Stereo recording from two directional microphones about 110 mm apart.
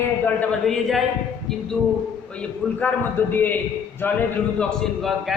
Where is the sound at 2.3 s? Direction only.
15° left (ahead or behind).